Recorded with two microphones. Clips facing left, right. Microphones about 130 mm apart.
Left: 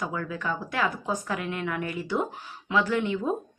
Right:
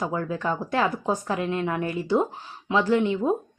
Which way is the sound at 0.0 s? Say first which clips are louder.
Right 4 dB; 30° right (ahead or behind).